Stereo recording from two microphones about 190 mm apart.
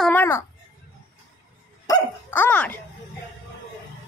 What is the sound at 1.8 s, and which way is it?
Speech, 15° left (ahead or behind).